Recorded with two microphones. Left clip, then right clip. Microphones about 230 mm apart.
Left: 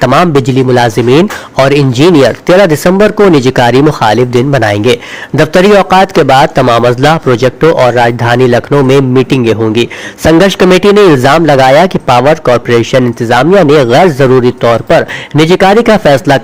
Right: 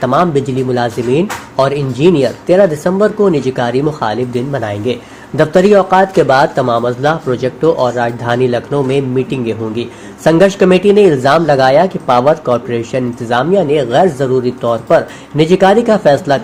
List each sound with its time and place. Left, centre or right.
0.0 s a man's voice: left
3.3 s a man's voice: left